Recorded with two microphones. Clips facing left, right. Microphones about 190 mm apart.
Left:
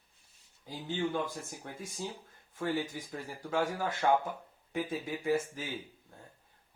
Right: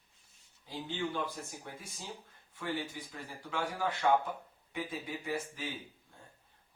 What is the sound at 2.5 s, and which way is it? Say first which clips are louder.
A man's voice: left 4 dB; 45° left (ahead or behind).